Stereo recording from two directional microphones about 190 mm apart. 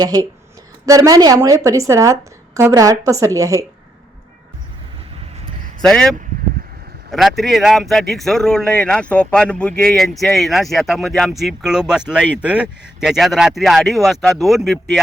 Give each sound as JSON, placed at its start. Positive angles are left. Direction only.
{"t": 0.0, "sound": "a woman's voice", "side_deg": -20}
{"t": 5.8, "sound": "speech", "side_deg": 5}